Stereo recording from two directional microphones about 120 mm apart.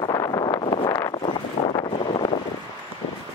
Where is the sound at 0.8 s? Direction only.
30° left (ahead or behind).